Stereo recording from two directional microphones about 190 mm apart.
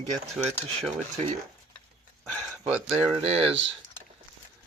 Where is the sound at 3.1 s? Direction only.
35° right (ahead or behind).